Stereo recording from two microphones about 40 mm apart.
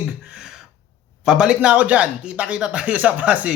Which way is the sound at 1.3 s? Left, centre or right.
Right.